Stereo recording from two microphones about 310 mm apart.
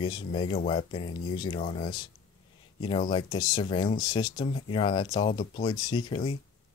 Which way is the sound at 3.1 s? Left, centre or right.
Centre.